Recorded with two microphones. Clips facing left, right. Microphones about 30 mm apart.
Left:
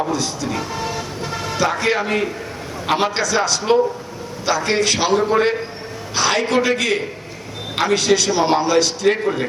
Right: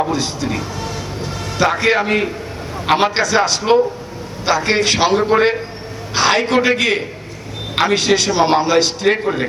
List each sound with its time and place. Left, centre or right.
0.0 s a man's voice: right
0.7 s vehicle: centre
1.5 s a man's voice: right